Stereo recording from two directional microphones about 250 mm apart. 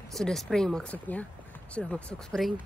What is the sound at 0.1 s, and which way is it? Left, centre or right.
Speech, centre.